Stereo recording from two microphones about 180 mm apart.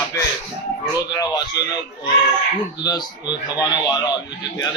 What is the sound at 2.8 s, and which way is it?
A man's voice, 20° left (ahead or behind).